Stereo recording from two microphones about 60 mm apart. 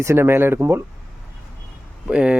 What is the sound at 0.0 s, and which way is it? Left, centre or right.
Speech, right.